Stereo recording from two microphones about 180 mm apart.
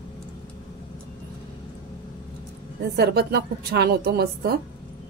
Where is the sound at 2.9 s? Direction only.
60° right (ahead or behind).